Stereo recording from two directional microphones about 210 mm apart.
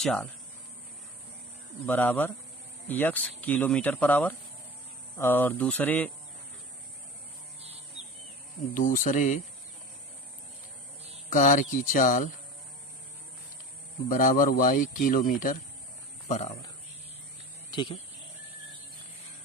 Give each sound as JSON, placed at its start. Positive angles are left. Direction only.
{"t": 0.0, "sound": "speech", "side_deg": 0}
{"t": 1.9, "sound": "speech", "side_deg": 10}
{"t": 8.7, "sound": "speech", "side_deg": 40}
{"t": 11.3, "sound": "speech", "side_deg": 35}
{"t": 14.1, "sound": "speech", "side_deg": 40}
{"t": 17.7, "sound": "a sound", "side_deg": 20}